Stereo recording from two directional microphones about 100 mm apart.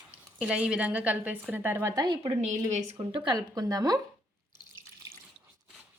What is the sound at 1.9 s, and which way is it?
A woman's voice, 50° right (ahead or behind).